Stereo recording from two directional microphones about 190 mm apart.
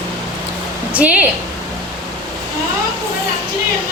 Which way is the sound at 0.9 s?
5° right (ahead or behind).